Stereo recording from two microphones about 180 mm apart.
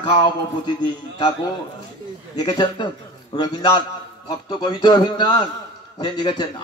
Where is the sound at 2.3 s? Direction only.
25° left (ahead or behind).